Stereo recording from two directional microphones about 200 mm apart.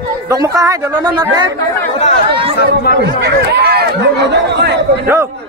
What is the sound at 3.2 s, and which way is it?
Speech, 55° right (ahead or behind).